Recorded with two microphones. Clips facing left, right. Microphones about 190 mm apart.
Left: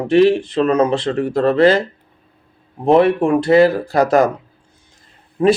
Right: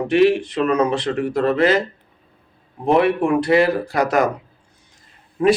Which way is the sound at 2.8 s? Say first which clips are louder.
Left 4 dB; 35° left (ahead or behind).